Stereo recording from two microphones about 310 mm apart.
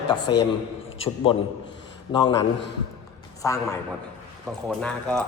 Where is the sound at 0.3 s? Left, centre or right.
Centre.